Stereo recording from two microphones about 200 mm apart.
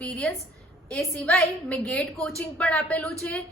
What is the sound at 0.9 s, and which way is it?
A woman's voice, 5° left (ahead or behind).